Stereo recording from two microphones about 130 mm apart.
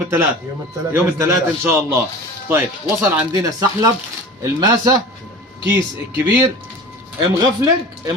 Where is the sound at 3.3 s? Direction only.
30° right (ahead or behind).